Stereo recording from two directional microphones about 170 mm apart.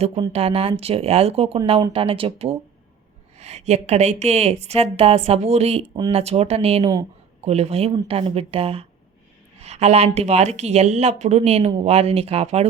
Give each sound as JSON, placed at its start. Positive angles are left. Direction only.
{"t": 0.2, "sound": "speech", "side_deg": -35}